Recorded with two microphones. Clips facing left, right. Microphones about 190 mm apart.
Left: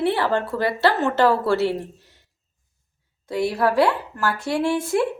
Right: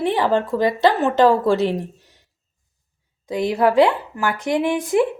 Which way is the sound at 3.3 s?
20° right (ahead or behind).